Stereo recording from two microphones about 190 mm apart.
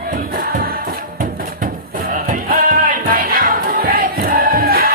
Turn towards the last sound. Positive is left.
turn(degrees=-50)  # may be behind; listen again after turning